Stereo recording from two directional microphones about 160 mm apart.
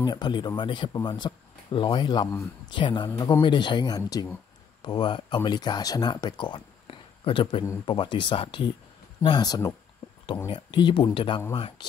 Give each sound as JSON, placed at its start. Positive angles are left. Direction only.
{"t": 0.0, "sound": "speech", "side_deg": 25}